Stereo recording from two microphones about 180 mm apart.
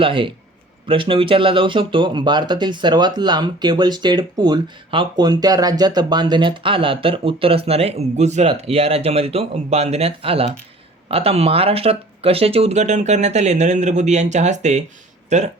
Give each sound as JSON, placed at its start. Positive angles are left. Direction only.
{"t": 0.0, "sound": "speech", "side_deg": -30}